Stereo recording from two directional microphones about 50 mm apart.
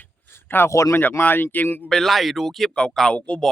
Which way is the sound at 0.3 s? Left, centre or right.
Left.